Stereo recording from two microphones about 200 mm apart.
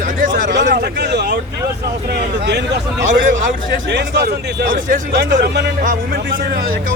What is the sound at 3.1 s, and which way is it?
Speech, 45° right (ahead or behind).